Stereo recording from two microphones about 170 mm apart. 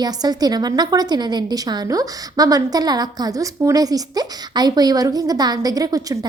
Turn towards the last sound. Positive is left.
turn(degrees=-20)  # may be behind; listen again after turning